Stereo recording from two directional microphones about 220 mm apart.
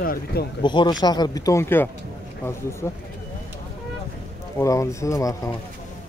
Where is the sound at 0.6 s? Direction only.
20° left (ahead or behind).